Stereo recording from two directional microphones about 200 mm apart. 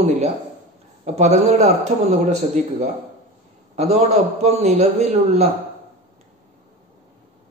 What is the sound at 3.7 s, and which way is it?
A man's voice, 35° right (ahead or behind).